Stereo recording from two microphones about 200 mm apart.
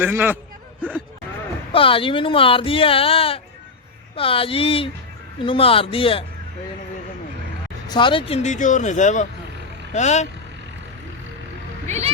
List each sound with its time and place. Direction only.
0.0 s speech: 10° right (ahead or behind)
1.7 s speech: 25° left (ahead or behind)
7.9 s speech: 25° left (ahead or behind)
11.9 s speech: 35° right (ahead or behind)